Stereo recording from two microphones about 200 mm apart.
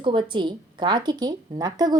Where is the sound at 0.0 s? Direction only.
25° right (ahead or behind).